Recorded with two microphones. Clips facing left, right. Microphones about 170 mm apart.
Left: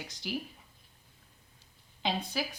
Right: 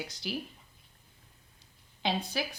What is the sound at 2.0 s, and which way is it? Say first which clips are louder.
Speech: right 1 dB; centre (ahead or behind).